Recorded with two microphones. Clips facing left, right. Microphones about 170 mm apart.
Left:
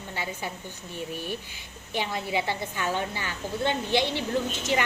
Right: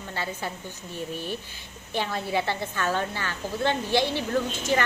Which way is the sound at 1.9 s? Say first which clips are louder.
Right 1 dB; 15° left (ahead or behind).